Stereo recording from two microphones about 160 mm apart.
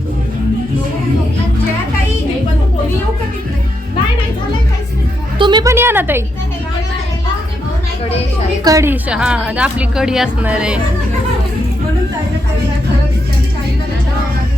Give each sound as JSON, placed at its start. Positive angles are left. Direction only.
{"t": 5.4, "sound": "a woman's voice", "side_deg": -30}
{"t": 5.7, "sound": "a woman's voice", "side_deg": -15}
{"t": 8.6, "sound": "a woman's voice", "side_deg": -20}